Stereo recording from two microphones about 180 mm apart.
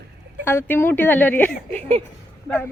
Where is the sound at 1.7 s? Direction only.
35° right (ahead or behind).